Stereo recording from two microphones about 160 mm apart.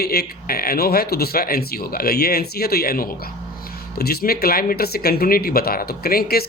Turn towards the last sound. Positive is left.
turn(degrees=70)  # may be behind; listen again after turning